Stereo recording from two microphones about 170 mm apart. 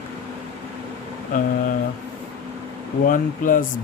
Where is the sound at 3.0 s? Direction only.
55° left (ahead or behind).